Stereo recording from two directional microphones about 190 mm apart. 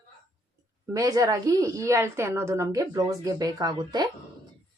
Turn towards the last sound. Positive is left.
turn(degrees=-20)  # may be behind; listen again after turning